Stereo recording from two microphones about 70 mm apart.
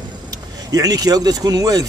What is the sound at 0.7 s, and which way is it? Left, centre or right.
Speech, right.